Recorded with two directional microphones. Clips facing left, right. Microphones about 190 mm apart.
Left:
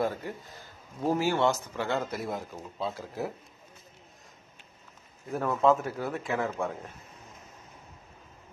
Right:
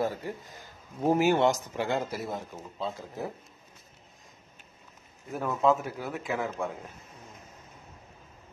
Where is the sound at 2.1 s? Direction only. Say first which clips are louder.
Left 1 dB; 5° right (ahead or behind).